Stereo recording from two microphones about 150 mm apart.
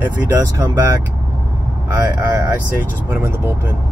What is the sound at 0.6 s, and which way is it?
Speech, 25° right (ahead or behind).